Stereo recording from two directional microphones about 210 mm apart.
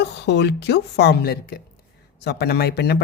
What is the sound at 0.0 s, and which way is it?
Speech, 55° left (ahead or behind).